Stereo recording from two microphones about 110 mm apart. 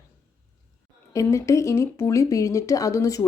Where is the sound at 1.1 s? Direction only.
30° left (ahead or behind).